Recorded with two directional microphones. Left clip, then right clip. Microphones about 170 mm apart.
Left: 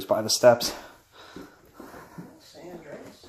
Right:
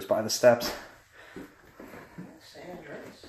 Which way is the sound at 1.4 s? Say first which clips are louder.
Even; 25° left (ahead or behind).